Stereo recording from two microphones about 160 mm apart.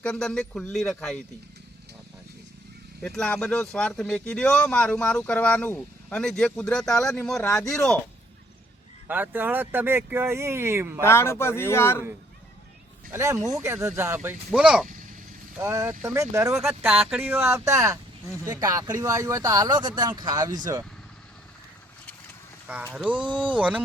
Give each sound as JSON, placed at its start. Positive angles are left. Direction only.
{"t": 0.0, "sound": "speech", "side_deg": 5}
{"t": 3.0, "sound": "speech", "side_deg": 5}
{"t": 9.0, "sound": "speech", "side_deg": -10}
{"t": 11.0, "sound": "speech", "side_deg": 15}
{"t": 13.1, "sound": "speech", "side_deg": -15}
{"t": 15.5, "sound": "speech", "side_deg": -15}
{"t": 22.6, "sound": "speech", "side_deg": -10}